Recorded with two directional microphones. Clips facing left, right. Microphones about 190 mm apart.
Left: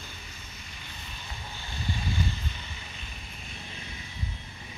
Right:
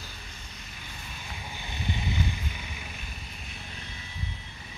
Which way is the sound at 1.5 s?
15° right (ahead or behind).